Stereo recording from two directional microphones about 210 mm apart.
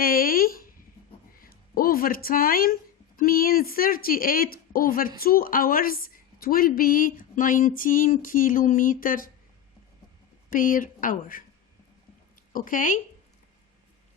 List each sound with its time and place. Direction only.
0.0 s a sound: 45° left (ahead or behind)
1.4 s speech: 45° left (ahead or behind)
10.5 s a woman's voice: 40° left (ahead or behind)
12.5 s a woman's voice: 40° left (ahead or behind)